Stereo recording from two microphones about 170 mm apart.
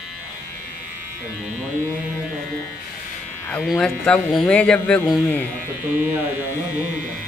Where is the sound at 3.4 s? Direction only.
5° left (ahead or behind).